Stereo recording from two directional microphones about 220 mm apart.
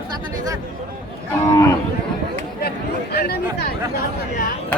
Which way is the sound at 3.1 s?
45° left (ahead or behind).